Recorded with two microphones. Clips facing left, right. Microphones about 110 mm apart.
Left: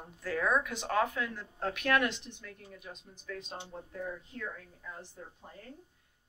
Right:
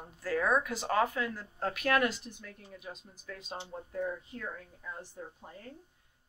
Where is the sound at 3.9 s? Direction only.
15° right (ahead or behind).